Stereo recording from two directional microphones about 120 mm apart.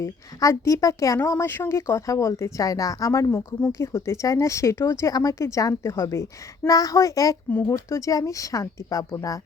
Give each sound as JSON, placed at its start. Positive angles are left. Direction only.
{"t": 0.0, "sound": "speech", "side_deg": 25}